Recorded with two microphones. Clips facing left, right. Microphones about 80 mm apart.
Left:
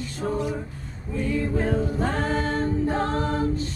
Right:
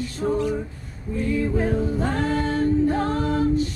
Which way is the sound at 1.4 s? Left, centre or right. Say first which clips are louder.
Right 2 dB; centre.